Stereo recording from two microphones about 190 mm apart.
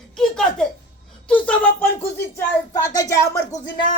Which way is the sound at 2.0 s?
10° left (ahead or behind).